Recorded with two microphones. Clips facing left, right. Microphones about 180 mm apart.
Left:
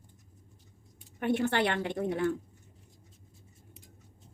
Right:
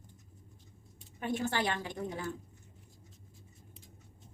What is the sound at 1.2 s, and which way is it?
A woman's voice, 65° left (ahead or behind).